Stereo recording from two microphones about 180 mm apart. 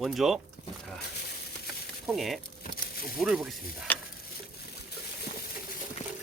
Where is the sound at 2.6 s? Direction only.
55° left (ahead or behind).